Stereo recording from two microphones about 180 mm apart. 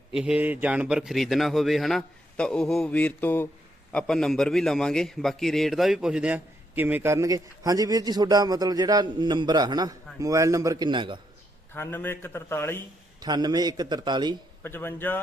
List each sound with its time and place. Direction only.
0.1 s a man's voice: 5° right (ahead or behind); by 11.2 s 25° right (ahead or behind)
11.7 s a man's voice: 10° left (ahead or behind)
13.1 s a man's voice: 20° right (ahead or behind)
14.6 s a man's voice: 10° left (ahead or behind)